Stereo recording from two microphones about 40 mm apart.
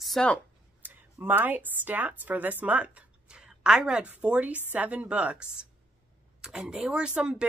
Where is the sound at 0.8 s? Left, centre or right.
Right.